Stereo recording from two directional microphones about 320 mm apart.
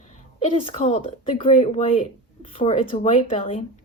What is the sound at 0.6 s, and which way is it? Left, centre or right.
A woman's voice, centre.